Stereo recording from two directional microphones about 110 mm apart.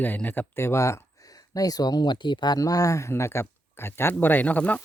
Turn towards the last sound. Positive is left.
turn(degrees=15)  # may be behind; listen again after turning